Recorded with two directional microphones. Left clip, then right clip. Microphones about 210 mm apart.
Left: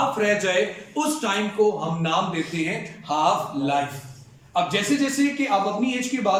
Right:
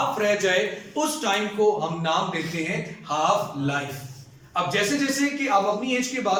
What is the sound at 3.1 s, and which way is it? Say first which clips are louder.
A man's voice: left 1 dB; 20° left (ahead or behind).